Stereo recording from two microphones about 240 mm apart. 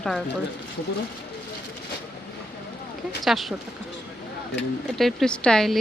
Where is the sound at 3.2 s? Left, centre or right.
Centre.